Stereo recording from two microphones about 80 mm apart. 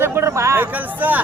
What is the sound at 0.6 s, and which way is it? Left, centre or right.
Speech, right.